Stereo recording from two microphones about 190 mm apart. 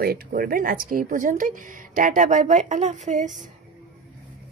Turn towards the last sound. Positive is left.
turn(degrees=-40)  # may be behind; listen again after turning